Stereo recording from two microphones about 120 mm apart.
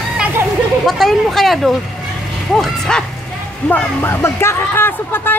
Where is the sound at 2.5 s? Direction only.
5° left (ahead or behind).